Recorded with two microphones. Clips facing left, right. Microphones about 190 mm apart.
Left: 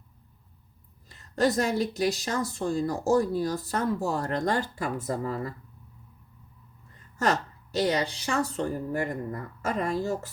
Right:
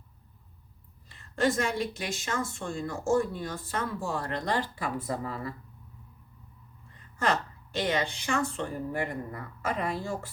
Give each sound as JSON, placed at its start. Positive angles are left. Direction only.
{"t": 1.0, "sound": "speech", "side_deg": 40}
{"t": 7.2, "sound": "speech", "side_deg": 40}